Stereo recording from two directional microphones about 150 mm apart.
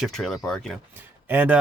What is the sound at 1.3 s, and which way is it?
Speech, 15° right (ahead or behind).